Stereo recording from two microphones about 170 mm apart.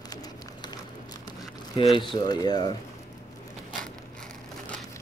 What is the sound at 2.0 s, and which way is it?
Speech, 30° left (ahead or behind).